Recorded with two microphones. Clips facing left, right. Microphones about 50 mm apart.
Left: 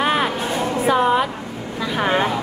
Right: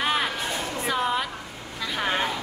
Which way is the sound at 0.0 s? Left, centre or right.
Centre.